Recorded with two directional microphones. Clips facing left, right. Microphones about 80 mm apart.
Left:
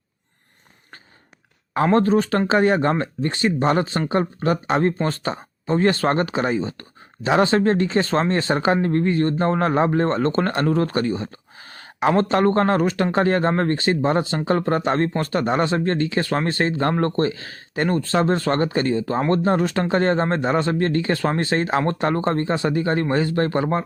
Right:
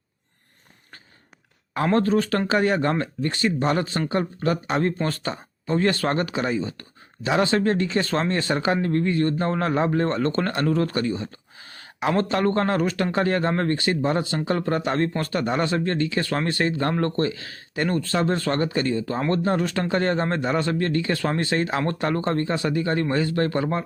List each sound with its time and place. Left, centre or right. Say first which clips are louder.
1.7 s speech: left 3 dB; left